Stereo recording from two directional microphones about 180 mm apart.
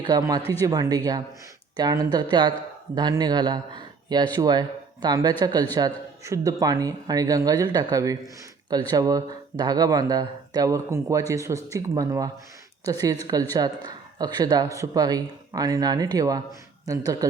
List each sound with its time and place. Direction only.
0.0 s speech: 20° right (ahead or behind)